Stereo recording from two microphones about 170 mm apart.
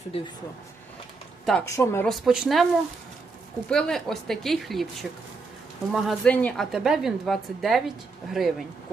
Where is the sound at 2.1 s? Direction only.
Centre (ahead or behind).